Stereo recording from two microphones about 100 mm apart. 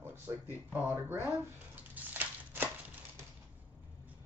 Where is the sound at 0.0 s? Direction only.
20° right (ahead or behind).